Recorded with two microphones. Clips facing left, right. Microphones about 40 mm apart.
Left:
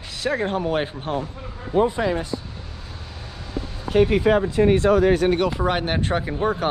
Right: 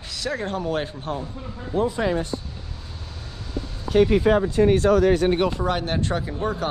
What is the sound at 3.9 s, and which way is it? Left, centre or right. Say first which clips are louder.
Speech: even; left.